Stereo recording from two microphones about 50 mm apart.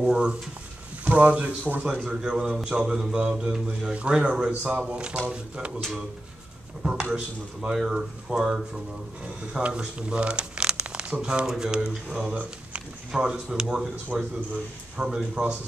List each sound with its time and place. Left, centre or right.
0.0 s speech: centre
1.0 s speech: right
6.8 s speech: centre
9.2 s speech: right
13.1 s speech: centre